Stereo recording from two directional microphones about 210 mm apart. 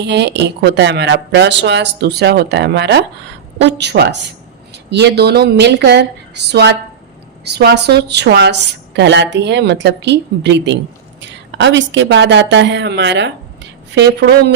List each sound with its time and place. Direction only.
0.0 s a woman's voice: 55° right (ahead or behind)